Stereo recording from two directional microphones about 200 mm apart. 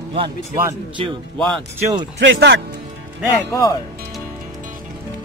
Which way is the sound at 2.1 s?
65° right (ahead or behind).